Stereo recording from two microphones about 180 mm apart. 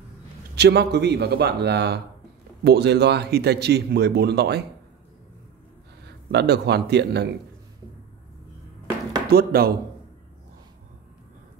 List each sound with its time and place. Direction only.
0.6 s speech: 65° right (ahead or behind)
6.0 s a man's voice: 65° right (ahead or behind)
9.3 s speech: 55° right (ahead or behind)